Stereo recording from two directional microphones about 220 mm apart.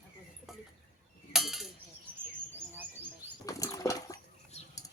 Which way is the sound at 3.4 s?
15° left (ahead or behind).